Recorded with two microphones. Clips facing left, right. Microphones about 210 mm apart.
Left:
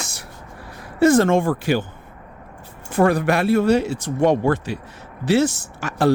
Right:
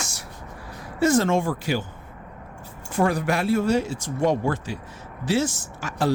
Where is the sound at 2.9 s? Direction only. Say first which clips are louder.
Left 5 dB; 60° left (ahead or behind).